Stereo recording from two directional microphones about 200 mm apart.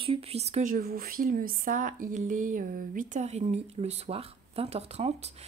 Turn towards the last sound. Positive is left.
turn(degrees=-30)  # may be behind; listen again after turning